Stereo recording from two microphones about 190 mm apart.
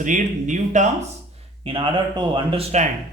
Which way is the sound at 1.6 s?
25° right (ahead or behind).